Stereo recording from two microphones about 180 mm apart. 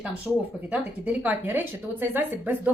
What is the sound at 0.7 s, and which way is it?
Speech, 10° right (ahead or behind).